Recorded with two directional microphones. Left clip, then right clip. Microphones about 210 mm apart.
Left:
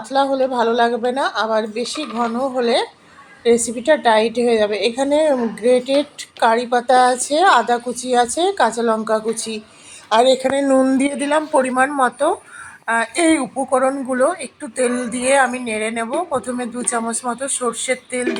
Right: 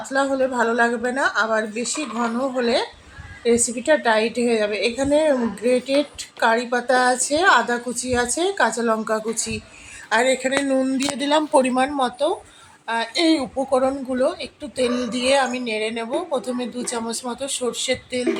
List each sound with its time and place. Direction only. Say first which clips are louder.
0.1 s a woman's voice: left 4 dB; 5° left (ahead or behind)
11.3 s a woman's voice: even; 15° right (ahead or behind); by 18.3 s centre (ahead or behind)